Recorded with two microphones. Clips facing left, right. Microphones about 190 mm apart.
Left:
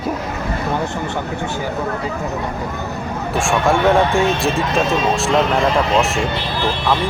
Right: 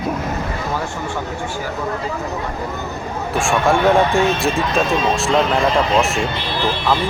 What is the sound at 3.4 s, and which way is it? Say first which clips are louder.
Speech: even; centre (ahead or behind).